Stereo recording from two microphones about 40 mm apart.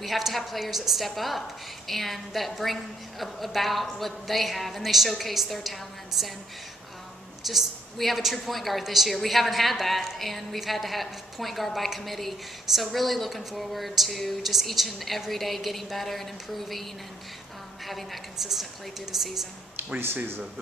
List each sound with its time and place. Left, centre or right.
0.0 s speech: centre
7.4 s speech: centre
17.8 s speech: centre
19.8 s a sound: right